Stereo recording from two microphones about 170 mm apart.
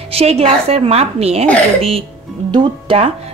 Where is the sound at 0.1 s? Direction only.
35° right (ahead or behind).